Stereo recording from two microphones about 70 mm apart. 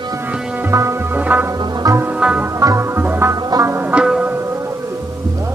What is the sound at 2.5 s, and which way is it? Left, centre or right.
Music, right.